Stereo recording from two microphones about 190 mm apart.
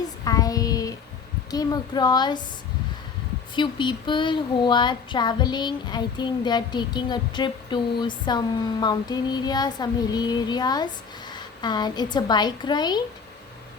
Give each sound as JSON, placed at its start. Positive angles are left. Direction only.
{"t": 0.3, "sound": "child singing", "side_deg": 20}
{"t": 1.5, "sound": "speech", "side_deg": 20}
{"t": 3.5, "sound": "a woman's voice", "side_deg": 25}